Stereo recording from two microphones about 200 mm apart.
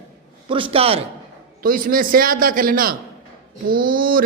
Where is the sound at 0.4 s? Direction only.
25° right (ahead or behind).